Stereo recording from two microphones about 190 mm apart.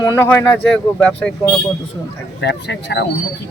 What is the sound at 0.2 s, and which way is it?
Speech, 10° left (ahead or behind).